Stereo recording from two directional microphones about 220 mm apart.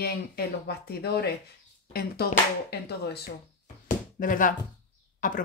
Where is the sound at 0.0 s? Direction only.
45° left (ahead or behind).